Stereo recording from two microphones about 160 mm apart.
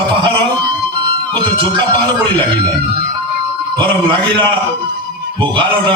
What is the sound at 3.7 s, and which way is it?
Speech, 30° right (ahead or behind).